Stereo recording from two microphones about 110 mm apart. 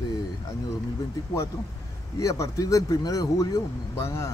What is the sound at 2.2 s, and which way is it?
Speech, 30° left (ahead or behind).